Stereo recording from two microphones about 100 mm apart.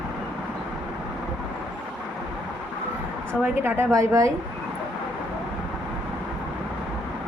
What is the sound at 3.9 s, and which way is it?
Speech, 35° right (ahead or behind).